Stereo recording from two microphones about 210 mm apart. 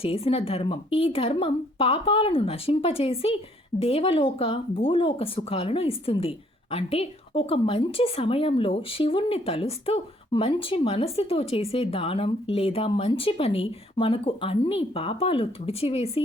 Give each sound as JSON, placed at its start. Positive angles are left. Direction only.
{"t": 0.0, "sound": "speech", "side_deg": 30}